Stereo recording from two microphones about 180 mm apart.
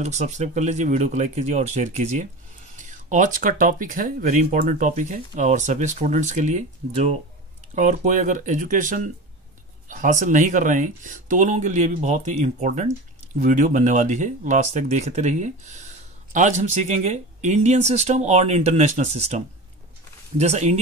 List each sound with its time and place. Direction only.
0.0 s speech: 40° right (ahead or behind)